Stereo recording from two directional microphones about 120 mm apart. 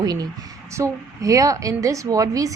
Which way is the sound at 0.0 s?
35° right (ahead or behind).